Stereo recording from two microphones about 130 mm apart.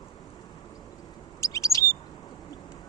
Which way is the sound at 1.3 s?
25° left (ahead or behind).